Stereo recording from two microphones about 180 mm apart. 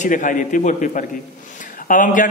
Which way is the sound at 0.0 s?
45° left (ahead or behind).